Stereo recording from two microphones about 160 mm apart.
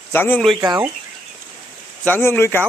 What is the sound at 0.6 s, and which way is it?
Speech, 25° right (ahead or behind).